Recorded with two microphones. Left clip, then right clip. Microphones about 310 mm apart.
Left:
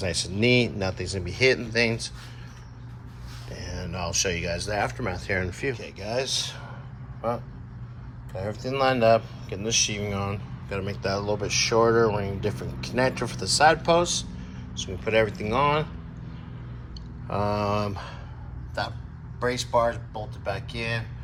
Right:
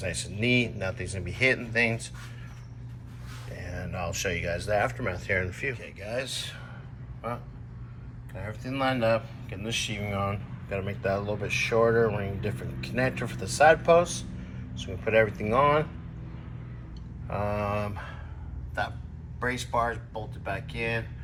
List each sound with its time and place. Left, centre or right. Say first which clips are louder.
0.0 s speech: left 5 dB; centre
3.5 s speech: left 2 dB; centre
8.3 s speech: left 7 dB; centre
11.7 s speech: left 2 dB; centre
11.9 s speech: left 3 dB; centre
17.2 s speech: left 4 dB; centre
19.4 s speech: left 4 dB; centre